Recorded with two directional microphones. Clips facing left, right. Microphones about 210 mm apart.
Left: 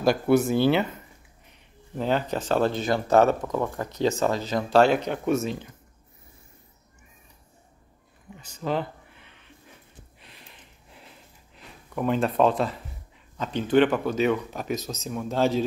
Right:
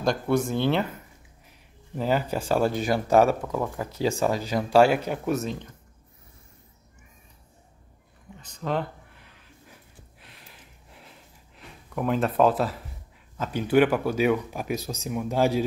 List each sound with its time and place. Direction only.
0.0 s speech: 5° left (ahead or behind)
2.0 s speech: 5° right (ahead or behind)
8.4 s a sound: 5° left (ahead or behind)
13.4 s speech: 10° right (ahead or behind)